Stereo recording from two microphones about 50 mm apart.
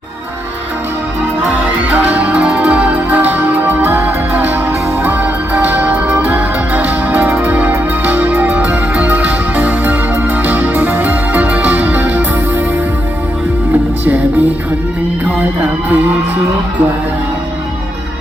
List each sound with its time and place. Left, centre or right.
1.9 s music: right
2.3 s music: right
5.5 s music: right